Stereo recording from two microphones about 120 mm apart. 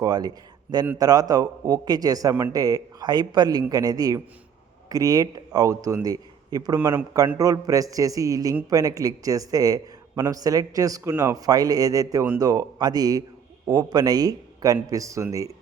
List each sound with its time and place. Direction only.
0.0 s a man's voice: 35° right (ahead or behind)